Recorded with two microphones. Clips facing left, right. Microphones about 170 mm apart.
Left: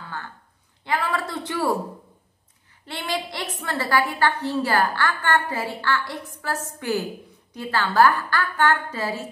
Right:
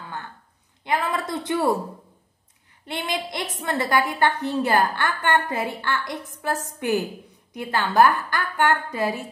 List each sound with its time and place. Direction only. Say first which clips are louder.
0.8 s a woman's voice: right 1 dB; 20° right (ahead or behind)
2.8 s a woman's voice: even; 15° right (ahead or behind)